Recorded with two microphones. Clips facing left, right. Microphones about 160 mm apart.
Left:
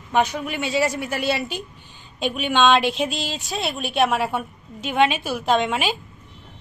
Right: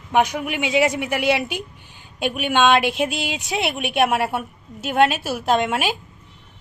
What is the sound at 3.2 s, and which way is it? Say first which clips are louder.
Speech: right 3 dB; 70° right (ahead or behind).